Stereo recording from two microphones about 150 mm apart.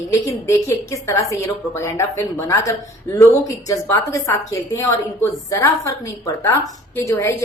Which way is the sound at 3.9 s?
20° left (ahead or behind).